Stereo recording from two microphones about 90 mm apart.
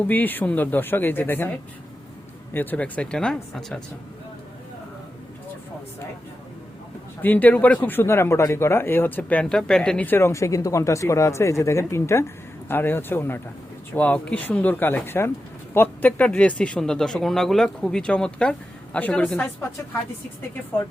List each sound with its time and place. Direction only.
0.1 s a man's voice: 20° left (ahead or behind)
2.5 s speech: 20° left (ahead or behind)
7.2 s a man's voice: 20° left (ahead or behind)
10.1 s a man's voice: 30° left (ahead or behind); by 19.5 s 10° left (ahead or behind)